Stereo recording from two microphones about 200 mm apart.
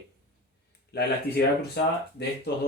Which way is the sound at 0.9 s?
55° left (ahead or behind).